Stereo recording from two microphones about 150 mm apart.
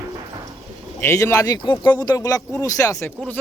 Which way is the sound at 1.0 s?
20° left (ahead or behind).